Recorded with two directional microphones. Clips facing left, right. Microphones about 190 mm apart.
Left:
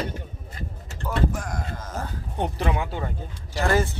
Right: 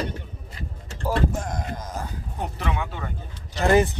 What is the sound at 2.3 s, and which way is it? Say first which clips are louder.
Speech: left 3 dB; 30° left (ahead or behind).